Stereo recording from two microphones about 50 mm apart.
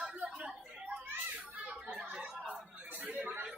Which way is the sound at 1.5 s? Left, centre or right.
Right.